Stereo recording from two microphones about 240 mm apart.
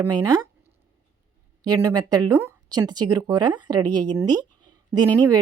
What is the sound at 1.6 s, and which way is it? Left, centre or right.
A woman's voice, centre.